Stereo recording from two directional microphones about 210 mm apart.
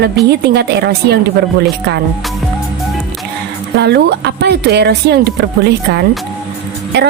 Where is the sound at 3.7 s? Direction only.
55° right (ahead or behind).